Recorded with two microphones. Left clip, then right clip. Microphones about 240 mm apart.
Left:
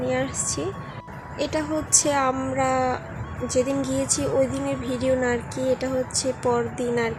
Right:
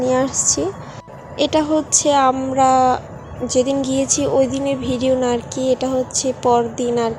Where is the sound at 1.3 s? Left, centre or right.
Centre.